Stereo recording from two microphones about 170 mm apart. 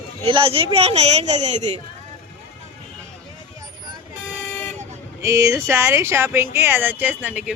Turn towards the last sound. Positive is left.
turn(degrees=-5)  # may be behind; listen again after turning